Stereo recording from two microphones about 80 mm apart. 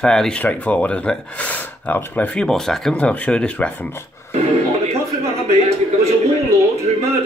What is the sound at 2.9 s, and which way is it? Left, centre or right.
Speech, centre.